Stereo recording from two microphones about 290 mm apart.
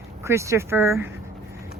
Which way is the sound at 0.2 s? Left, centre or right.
Centre.